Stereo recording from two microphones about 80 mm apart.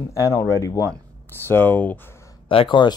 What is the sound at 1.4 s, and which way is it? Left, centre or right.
Speech, left.